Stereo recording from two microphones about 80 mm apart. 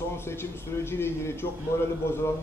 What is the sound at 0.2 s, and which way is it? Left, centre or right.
A man's voice, left.